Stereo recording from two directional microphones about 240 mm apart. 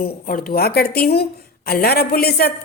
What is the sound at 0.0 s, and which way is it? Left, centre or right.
Speech, left.